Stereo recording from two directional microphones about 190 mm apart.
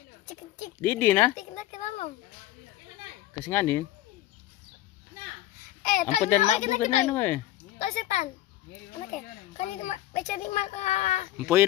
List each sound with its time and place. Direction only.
0.8 s speech: 10° left (ahead or behind)
1.3 s a sound: 40° left (ahead or behind)
3.4 s speech: 10° left (ahead or behind)
5.8 s a sound: 40° left (ahead or behind)
6.4 s a child's voice: 40° left (ahead or behind)
7.1 s speech: 10° left (ahead or behind)
7.8 s a sound: 40° left (ahead or behind)
9.1 s a child's voice: 40° left (ahead or behind)
11.3 s speech: 10° right (ahead or behind)